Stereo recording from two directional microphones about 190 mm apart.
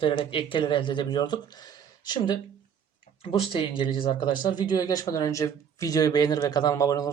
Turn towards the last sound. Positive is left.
turn(degrees=20)  # may be behind; listen again after turning